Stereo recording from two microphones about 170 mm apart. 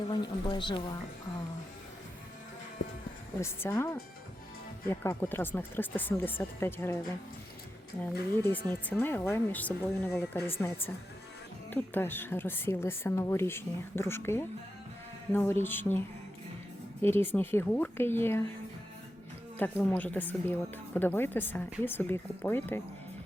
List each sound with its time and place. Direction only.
0.1 s a woman's voice: 25° left (ahead or behind)
3.4 s speech: 15° left (ahead or behind)
8.4 s speech: 15° left (ahead or behind)
11.7 s speech: 10° left (ahead or behind)
19.5 s speech: 10° left (ahead or behind)